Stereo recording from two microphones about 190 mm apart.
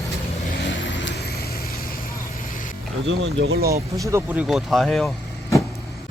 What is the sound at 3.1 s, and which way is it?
Speech, 80° right.